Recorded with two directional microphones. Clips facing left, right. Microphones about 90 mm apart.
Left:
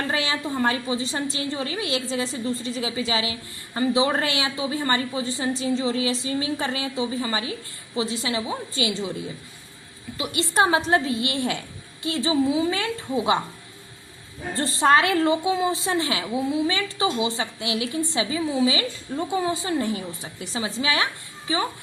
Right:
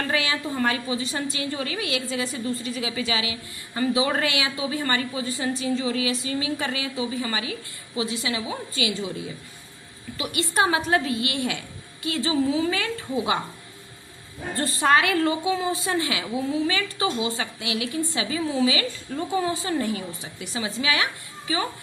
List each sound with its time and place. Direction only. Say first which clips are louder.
0.1 s a woman's voice: even; 30° left (ahead or behind)
10.2 s a woman's voice: left 2 dB; 25° left (ahead or behind)
14.5 s a woman's voice: left 2 dB; 25° left (ahead or behind)